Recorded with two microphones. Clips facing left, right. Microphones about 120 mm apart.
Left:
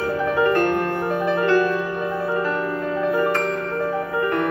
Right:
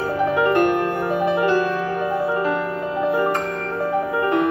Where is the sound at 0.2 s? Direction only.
20° right (ahead or behind).